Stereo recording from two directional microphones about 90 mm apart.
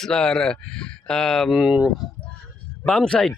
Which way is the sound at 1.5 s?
10° right (ahead or behind).